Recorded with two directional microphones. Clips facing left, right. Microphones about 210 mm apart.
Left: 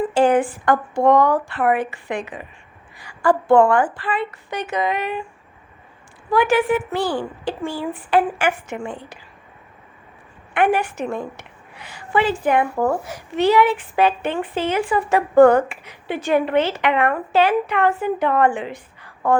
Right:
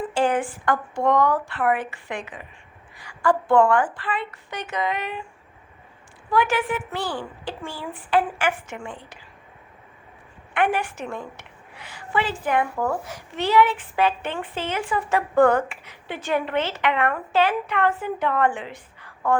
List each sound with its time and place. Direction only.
0.1 s a sound: 15° left (ahead or behind)
1.5 s a woman's voice: 15° left (ahead or behind)
3.2 s a woman's voice: 40° left (ahead or behind)
3.7 s a woman's voice: 10° left (ahead or behind)
6.3 s a woman's voice: 10° left (ahead or behind)
10.5 s a woman's voice: 10° left (ahead or behind)
11.0 s a woman's voice: 40° left (ahead or behind)
11.3 s a woman's voice: 15° left (ahead or behind)